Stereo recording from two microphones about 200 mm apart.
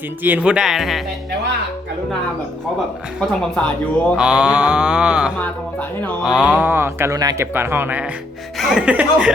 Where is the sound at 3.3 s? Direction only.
5° left (ahead or behind).